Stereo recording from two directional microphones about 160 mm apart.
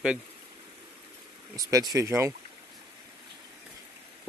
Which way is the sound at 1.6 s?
25° right (ahead or behind).